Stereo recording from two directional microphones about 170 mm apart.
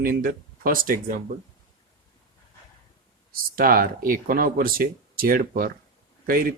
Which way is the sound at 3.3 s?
55° right (ahead or behind).